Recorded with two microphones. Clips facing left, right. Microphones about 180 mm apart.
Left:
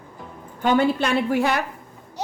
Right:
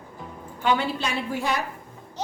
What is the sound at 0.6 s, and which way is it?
Speech, 50° left (ahead or behind).